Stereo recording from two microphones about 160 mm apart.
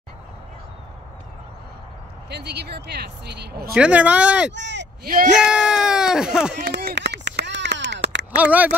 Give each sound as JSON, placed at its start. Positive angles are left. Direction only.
{"t": 2.2, "sound": "speech", "side_deg": -90}
{"t": 3.7, "sound": "speech", "side_deg": -5}
{"t": 4.6, "sound": "speech", "side_deg": -90}
{"t": 5.3, "sound": "a sound", "side_deg": -5}
{"t": 6.6, "sound": "a sound", "side_deg": -85}
{"t": 8.4, "sound": "speech", "side_deg": -10}